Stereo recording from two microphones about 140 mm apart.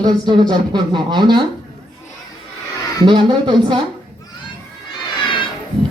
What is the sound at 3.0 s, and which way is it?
Speech, 35° right (ahead or behind).